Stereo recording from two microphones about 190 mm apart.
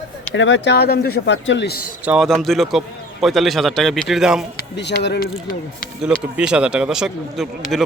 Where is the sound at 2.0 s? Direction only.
Centre (ahead or behind).